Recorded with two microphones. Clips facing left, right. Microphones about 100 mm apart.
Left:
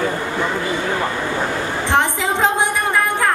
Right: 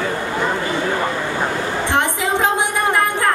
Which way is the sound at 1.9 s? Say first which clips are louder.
Left 2 dB; 20° left (ahead or behind).